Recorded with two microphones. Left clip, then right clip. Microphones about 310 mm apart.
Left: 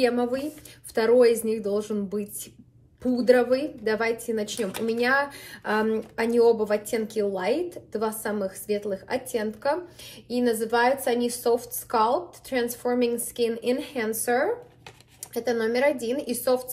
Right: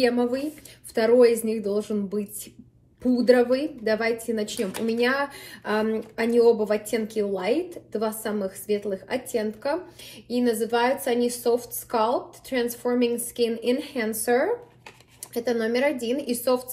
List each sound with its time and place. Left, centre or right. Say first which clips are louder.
0.0 s a woman's voice: right 1 dB; centre